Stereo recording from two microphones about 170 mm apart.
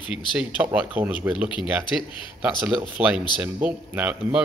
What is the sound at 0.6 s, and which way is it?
A man's voice, 10° right (ahead or behind).